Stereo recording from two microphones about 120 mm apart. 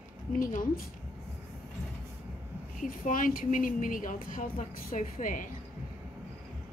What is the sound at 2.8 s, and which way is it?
A woman's voice, 90° left.